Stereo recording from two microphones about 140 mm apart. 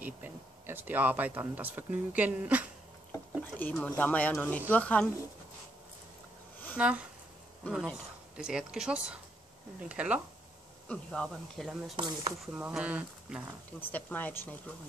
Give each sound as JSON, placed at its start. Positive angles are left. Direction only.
{"t": 0.0, "sound": "speech", "side_deg": -15}
{"t": 3.1, "sound": "speech", "side_deg": 15}
{"t": 6.8, "sound": "speech", "side_deg": -10}
{"t": 10.9, "sound": "speech", "side_deg": 5}
{"t": 12.0, "sound": "speech", "side_deg": -30}
{"t": 12.5, "sound": "speech", "side_deg": -10}
{"t": 13.7, "sound": "speech", "side_deg": 10}